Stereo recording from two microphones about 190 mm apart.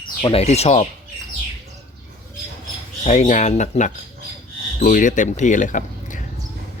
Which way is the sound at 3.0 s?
40° left (ahead or behind).